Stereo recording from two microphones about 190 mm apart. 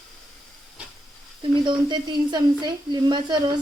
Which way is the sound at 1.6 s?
25° right (ahead or behind).